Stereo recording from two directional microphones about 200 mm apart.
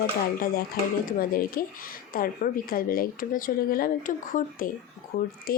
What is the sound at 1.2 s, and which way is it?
Speech, 45° left (ahead or behind).